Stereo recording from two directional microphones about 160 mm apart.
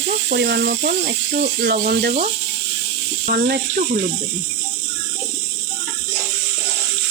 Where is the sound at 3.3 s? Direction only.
75° right (ahead or behind).